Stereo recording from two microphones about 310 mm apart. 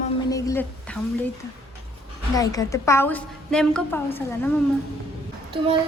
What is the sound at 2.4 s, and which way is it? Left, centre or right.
A woman's voice, centre.